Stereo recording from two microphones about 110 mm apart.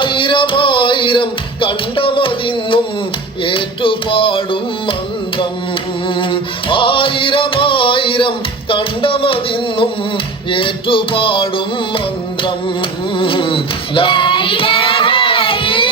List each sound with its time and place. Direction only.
0.0 s music: 50° left (ahead or behind)
6.1 s music: 50° left (ahead or behind)
13.1 s female singing: 50° left (ahead or behind)